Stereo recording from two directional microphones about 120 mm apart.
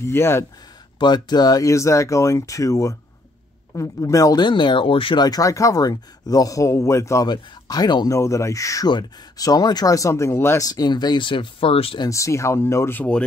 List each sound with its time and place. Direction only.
0.0 s speech: 20° left (ahead or behind)
0.9 s speech: 35° left (ahead or behind); by 10.7 s 20° left (ahead or behind)
10.7 s speech: 35° left (ahead or behind); by 12.0 s 50° left (ahead or behind)
12.0 s speech: 25° left (ahead or behind)